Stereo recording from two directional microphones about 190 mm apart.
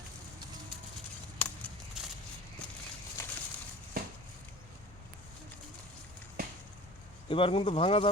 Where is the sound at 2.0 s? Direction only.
5° right (ahead or behind); by 3.3 s 15° left (ahead or behind).